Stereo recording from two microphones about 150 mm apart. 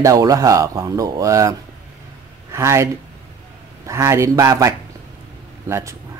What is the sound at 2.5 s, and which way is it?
Speech, 20° right (ahead or behind).